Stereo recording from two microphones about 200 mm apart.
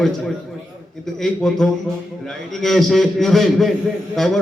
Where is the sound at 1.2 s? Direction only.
Centre (ahead or behind).